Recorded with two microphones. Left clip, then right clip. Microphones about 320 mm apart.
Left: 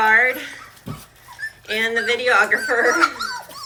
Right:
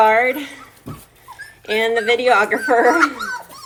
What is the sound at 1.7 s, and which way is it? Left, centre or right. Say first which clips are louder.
Speech: right 4 dB; centre.